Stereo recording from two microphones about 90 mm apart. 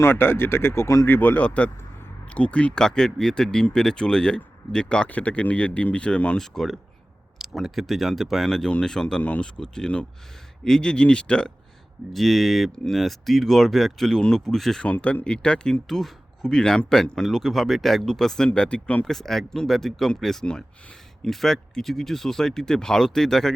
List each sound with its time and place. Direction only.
0.0 s speech: 25° left (ahead or behind)
1.0 s speech: 20° left (ahead or behind); by 14.8 s 5° left (ahead or behind)
14.8 s speech: 15° left (ahead or behind)
19.1 s speech: 5° left (ahead or behind)